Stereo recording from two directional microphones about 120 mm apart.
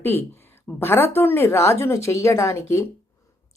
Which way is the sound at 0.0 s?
20° left (ahead or behind).